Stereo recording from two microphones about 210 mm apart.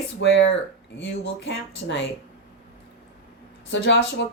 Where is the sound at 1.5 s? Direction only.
55° left (ahead or behind).